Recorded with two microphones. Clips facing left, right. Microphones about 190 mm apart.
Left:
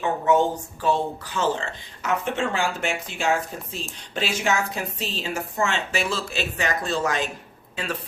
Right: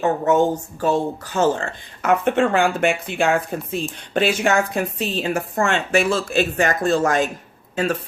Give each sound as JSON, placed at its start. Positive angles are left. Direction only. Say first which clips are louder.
{"t": 0.0, "sound": "speech", "louder": "right 3 dB", "side_deg": -45}